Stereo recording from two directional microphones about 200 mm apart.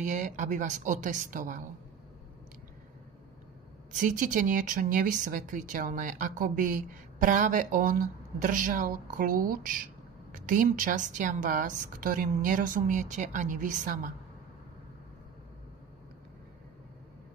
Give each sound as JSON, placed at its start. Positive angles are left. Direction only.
{"t": 0.0, "sound": "speech", "side_deg": -35}
{"t": 3.9, "sound": "speech", "side_deg": -40}